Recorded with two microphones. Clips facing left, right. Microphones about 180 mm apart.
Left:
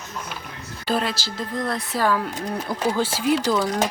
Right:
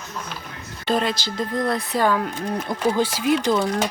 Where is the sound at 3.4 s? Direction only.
20° right (ahead or behind).